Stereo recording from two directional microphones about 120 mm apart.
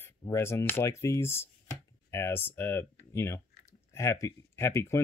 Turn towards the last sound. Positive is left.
turn(degrees=25)  # may be behind; listen again after turning